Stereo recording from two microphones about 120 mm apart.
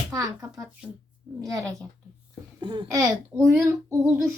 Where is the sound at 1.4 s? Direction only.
30° right (ahead or behind).